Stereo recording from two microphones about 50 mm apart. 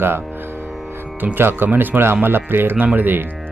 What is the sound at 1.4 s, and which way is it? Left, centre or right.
Speech, right.